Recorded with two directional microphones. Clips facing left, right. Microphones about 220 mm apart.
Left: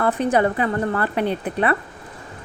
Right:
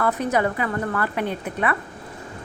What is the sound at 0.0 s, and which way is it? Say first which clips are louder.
Speech: left 3 dB; 30° left (ahead or behind).